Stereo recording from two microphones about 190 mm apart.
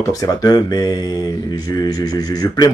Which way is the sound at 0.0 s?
20° left (ahead or behind).